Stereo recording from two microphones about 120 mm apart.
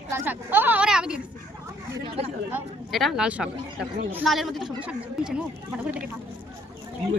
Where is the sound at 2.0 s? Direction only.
55° right (ahead or behind).